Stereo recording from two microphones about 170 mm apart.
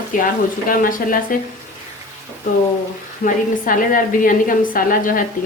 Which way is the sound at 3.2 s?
55° left (ahead or behind).